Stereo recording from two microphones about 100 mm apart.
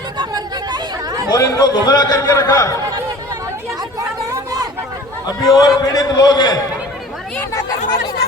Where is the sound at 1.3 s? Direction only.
35° left (ahead or behind).